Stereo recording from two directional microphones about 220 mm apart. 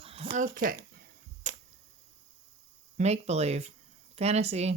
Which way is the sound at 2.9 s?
30° right (ahead or behind).